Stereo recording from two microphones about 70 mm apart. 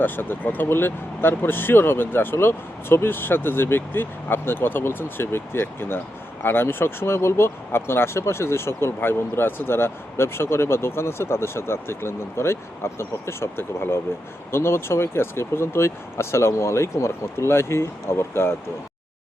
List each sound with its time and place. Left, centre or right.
0.0 s speech: left